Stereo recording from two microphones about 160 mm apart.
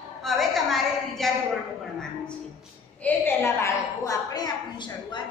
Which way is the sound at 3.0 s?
15° left (ahead or behind).